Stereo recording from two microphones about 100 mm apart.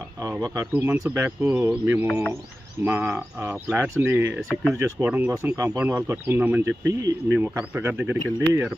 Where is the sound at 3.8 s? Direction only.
25° right (ahead or behind).